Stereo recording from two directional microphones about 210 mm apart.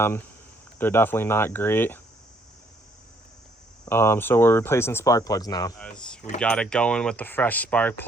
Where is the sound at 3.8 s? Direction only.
10° left (ahead or behind).